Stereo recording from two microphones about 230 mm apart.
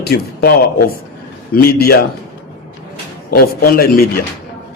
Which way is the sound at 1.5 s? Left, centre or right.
Left.